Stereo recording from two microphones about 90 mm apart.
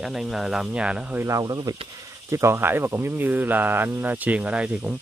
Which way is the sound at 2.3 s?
30° right (ahead or behind).